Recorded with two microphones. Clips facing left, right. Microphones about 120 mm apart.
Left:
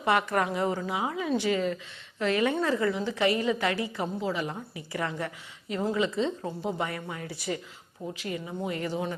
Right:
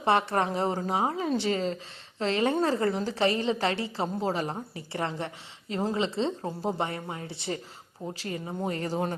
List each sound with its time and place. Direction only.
0.0 s a woman's voice: 30° right (ahead or behind)